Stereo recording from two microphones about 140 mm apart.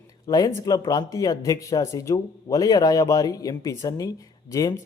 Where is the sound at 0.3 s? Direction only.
25° left (ahead or behind).